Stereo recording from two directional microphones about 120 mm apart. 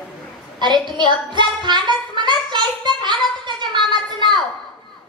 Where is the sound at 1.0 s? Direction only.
40° right (ahead or behind).